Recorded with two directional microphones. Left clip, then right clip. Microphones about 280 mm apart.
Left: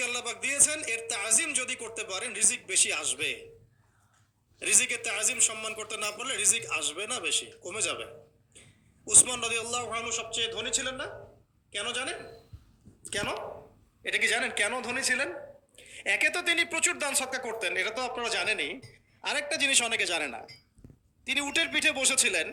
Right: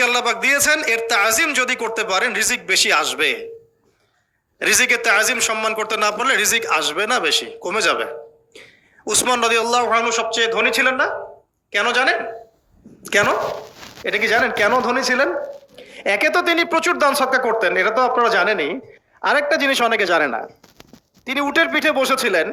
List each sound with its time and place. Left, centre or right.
0.0 s a man's voice: right
4.6 s a man's voice: right
13.0 s dog: right
14.1 s a man's voice: centre